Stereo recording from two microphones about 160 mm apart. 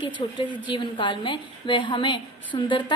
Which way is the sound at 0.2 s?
35° left (ahead or behind).